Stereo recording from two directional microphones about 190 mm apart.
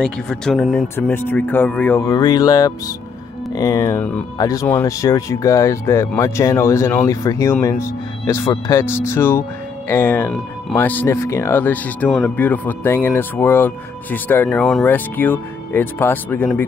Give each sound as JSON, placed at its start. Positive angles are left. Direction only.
{"t": 0.0, "sound": "speech", "side_deg": 5}